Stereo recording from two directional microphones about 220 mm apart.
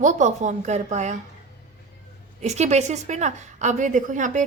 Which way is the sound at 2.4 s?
30° right (ahead or behind).